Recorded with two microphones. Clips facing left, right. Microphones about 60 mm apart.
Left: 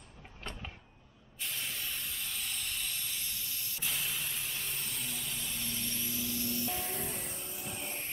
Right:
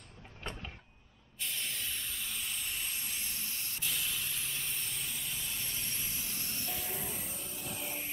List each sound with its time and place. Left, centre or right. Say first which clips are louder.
1.4 s spray: even; centre; by 3.3 s right
3.3 s spray: right 1 dB; right
3.8 s vehicle: left 1 dB; centre
5.6 s vehicle: left 2 dB; centre; by 6.7 s right
6.7 s music: left 2 dB; centre